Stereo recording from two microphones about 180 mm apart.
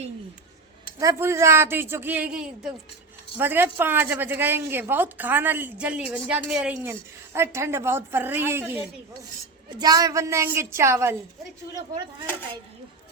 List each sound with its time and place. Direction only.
0.9 s a woman's voice: 15° right (ahead or behind)